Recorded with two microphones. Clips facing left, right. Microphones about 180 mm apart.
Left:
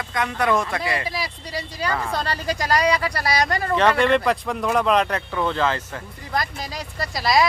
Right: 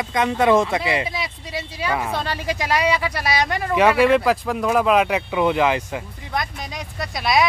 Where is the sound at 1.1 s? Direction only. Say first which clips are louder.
Even; centre (ahead or behind).